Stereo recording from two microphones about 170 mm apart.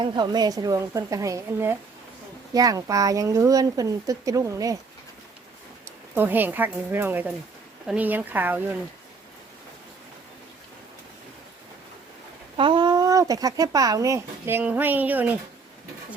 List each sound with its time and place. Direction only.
0.0 s speech: 25° right (ahead or behind)
6.1 s speech: 10° right (ahead or behind)
12.5 s speech: 30° right (ahead or behind); by 15.4 s 10° right (ahead or behind)